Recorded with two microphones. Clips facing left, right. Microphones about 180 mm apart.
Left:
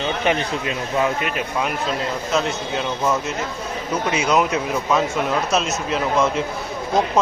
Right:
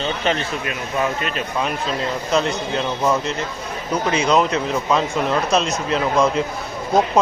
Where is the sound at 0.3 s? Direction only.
20° left (ahead or behind).